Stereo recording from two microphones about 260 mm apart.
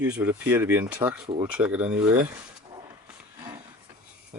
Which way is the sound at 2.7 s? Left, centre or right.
Centre.